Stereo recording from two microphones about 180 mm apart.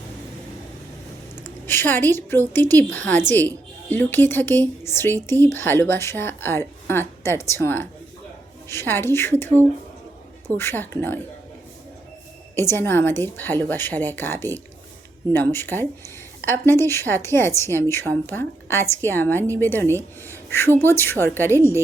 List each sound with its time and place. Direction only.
1.6 s a woman's voice: 10° left (ahead or behind)
10.6 s a woman's voice: 10° left (ahead or behind)
12.5 s a woman's voice: 15° left (ahead or behind)